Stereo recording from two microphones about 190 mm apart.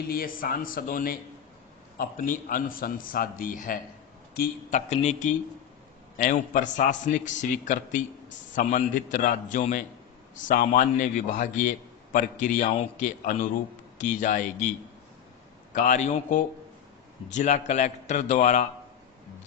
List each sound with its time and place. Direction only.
0.1 s a man's voice: 50° left (ahead or behind)
15.7 s a man's voice: 40° left (ahead or behind)